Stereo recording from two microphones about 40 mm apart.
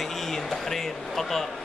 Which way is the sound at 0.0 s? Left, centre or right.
Centre.